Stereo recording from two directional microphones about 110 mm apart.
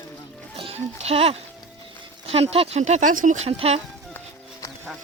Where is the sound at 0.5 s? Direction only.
60° right (ahead or behind).